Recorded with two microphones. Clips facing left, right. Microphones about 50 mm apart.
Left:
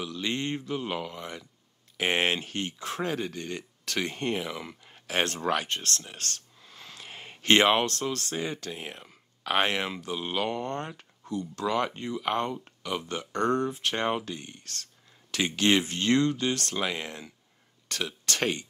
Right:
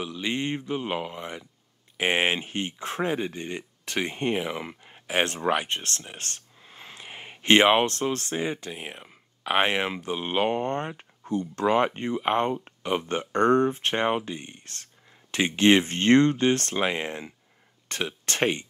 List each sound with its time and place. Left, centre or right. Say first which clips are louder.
0.0 s speech: right 2 dB; centre
14.0 s speech: right 3 dB; right